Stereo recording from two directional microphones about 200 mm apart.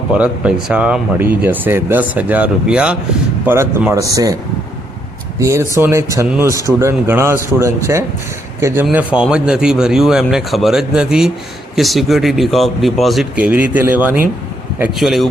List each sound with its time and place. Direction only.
0.1 s speech: 5° right (ahead or behind)
5.4 s speech: 15° right (ahead or behind)